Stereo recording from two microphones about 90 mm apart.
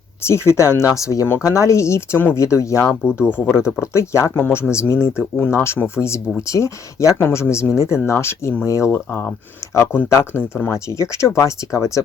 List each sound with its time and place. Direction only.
0.3 s speech: 30° left (ahead or behind)